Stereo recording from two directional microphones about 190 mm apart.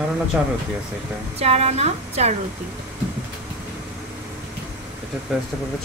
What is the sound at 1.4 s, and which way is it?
Speech, 35° right (ahead or behind).